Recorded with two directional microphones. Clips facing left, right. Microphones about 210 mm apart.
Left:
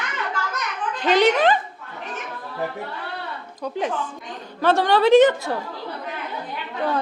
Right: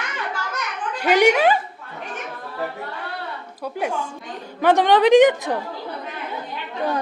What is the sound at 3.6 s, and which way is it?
A man's voice, 10° right (ahead or behind).